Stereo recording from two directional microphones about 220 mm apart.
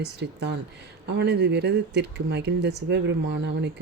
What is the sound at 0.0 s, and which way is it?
Speech, 50° right (ahead or behind).